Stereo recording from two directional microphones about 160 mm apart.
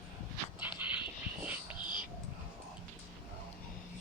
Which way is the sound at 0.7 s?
15° right (ahead or behind).